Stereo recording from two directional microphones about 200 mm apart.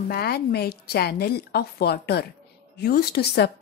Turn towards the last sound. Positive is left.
turn(degrees=55)  # may be behind; listen again after turning